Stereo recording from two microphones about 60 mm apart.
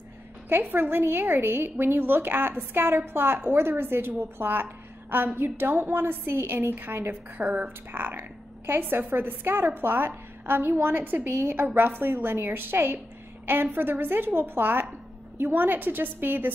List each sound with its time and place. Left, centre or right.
0.5 s a woman's voice: right
11.5 s a woman's voice: right